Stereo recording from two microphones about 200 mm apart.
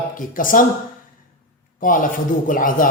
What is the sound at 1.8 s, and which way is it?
Speech, 40° left (ahead or behind).